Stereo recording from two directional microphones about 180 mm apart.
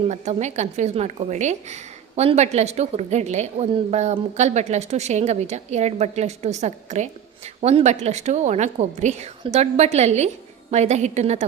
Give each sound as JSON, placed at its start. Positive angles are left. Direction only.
{"t": 0.1, "sound": "a woman's voice", "side_deg": -40}